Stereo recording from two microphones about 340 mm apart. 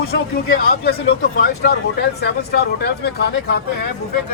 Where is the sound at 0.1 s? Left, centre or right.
Left.